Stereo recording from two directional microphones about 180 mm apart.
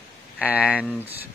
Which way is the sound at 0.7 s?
10° left (ahead or behind).